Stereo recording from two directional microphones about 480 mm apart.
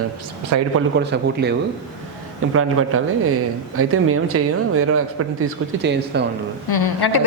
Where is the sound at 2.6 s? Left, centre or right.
Right.